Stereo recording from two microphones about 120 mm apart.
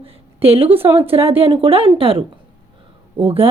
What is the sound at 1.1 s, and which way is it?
Speech, 55° right (ahead or behind).